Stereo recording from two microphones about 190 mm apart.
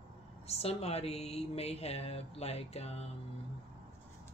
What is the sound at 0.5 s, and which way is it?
Speech, 30° left (ahead or behind).